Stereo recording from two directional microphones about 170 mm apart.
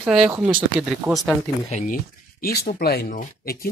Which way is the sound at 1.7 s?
40° left (ahead or behind).